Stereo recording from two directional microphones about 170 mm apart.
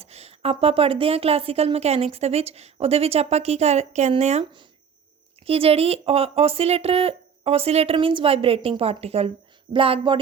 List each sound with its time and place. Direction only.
0.0 s a woman's voice: 40° right (ahead or behind)